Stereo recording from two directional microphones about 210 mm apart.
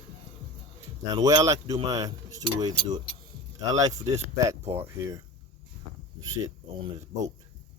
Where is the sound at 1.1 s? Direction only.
15° right (ahead or behind).